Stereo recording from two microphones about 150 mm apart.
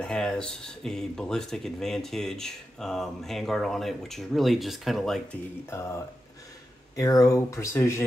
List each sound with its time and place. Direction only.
0.0 s speech: 5° left (ahead or behind)
5.7 s speech: 15° left (ahead or behind)
7.0 s speech: 20° left (ahead or behind)